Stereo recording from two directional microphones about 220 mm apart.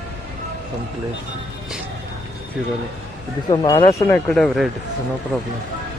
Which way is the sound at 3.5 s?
15° left (ahead or behind).